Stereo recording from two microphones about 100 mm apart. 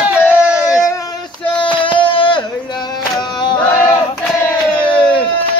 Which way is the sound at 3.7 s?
25° left (ahead or behind).